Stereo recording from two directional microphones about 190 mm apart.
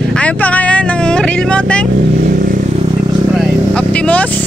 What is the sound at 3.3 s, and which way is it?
Vehicle, 5° left (ahead or behind).